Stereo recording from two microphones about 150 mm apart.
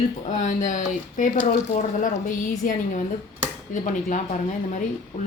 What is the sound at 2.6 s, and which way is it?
Speech, 60° left (ahead or behind).